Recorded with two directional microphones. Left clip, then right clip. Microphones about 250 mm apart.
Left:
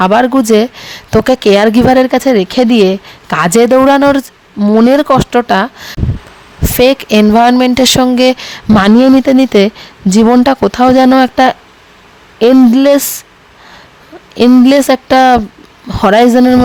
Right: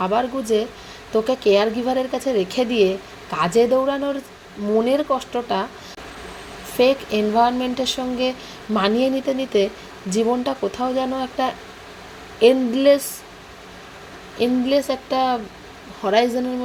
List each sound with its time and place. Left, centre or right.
0.0 s speech: left
14.3 s speech: left